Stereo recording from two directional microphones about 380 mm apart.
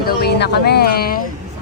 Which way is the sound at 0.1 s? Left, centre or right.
Left.